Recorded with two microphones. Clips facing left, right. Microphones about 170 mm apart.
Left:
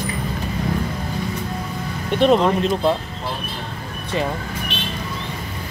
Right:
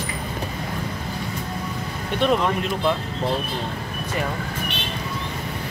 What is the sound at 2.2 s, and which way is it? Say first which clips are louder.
Speech: left 5 dB; 30° left (ahead or behind).